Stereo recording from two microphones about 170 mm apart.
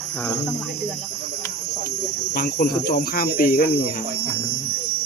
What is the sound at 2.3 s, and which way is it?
Speech, 60° left (ahead or behind).